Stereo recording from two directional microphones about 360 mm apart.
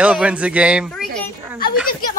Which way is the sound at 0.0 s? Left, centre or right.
Centre.